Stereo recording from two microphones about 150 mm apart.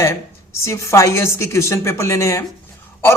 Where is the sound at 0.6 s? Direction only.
20° left (ahead or behind).